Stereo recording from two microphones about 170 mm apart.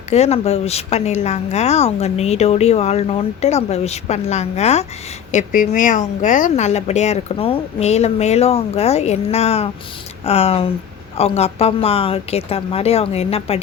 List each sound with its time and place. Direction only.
0.1 s speech: 40° left (ahead or behind)